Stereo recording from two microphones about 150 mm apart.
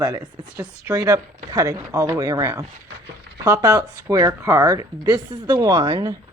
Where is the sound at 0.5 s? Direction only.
10° right (ahead or behind).